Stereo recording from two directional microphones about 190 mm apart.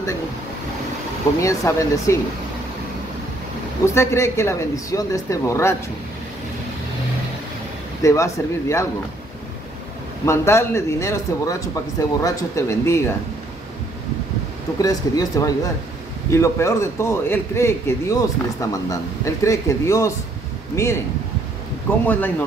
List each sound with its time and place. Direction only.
1.4 s speech: 15° left (ahead or behind)
3.8 s speech: 15° left (ahead or behind)
8.0 s speech: 15° left (ahead or behind)
10.2 s speech: 15° left (ahead or behind)
14.8 s speech: 20° left (ahead or behind)
22.0 s speech: 10° left (ahead or behind)